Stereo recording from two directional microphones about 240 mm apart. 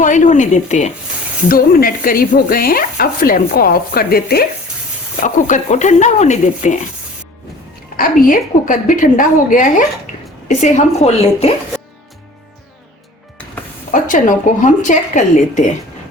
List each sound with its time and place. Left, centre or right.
0.0 s speech: left
7.9 s speech: left
10.1 s a sound: left
10.5 s speech: left
13.9 s speech: left